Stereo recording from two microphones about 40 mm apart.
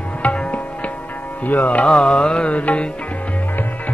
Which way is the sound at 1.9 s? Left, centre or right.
Centre.